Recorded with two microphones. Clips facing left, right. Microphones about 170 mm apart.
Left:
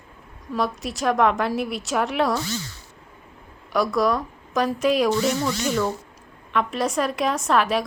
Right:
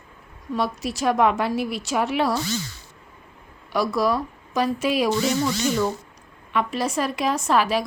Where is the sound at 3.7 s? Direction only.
Centre (ahead or behind).